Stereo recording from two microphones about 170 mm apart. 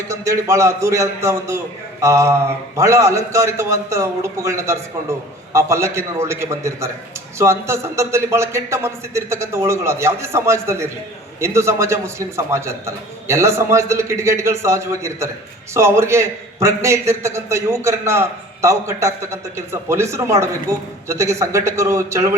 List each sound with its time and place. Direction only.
0.1 s a man's voice: 15° right (ahead or behind)